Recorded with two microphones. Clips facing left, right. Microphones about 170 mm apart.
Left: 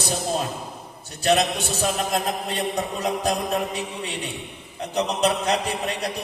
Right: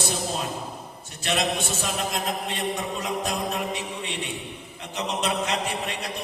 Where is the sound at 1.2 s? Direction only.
40° left (ahead or behind).